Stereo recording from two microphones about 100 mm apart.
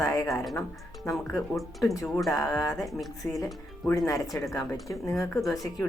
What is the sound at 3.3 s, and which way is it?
Speech, 35° left (ahead or behind).